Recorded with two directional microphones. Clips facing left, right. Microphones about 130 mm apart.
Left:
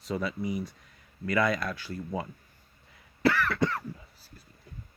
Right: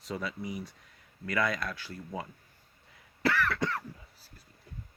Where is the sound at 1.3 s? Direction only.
15° left (ahead or behind).